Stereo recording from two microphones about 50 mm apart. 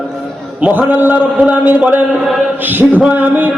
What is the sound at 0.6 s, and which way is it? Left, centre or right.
Mantra, right.